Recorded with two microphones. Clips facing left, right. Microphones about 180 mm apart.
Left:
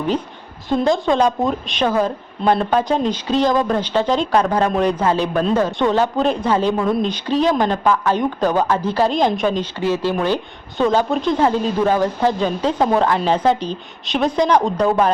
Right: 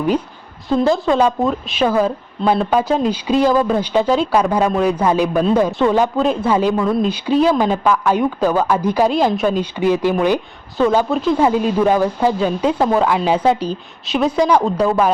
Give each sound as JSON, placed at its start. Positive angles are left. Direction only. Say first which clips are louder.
{"t": 0.7, "sound": "speech", "louder": "right 2 dB", "side_deg": 0}